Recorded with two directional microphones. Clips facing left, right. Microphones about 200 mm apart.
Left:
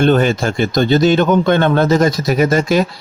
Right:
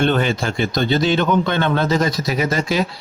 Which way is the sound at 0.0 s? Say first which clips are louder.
Left 5 dB; 45° left (ahead or behind).